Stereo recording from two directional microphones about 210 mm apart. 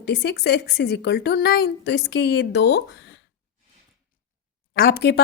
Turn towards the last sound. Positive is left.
turn(degrees=50)  # may be behind; listen again after turning